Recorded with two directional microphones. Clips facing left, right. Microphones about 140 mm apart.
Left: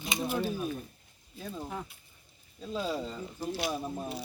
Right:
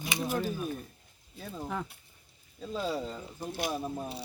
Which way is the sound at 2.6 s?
Centre (ahead or behind).